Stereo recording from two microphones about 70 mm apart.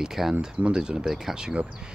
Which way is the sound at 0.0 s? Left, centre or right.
Centre.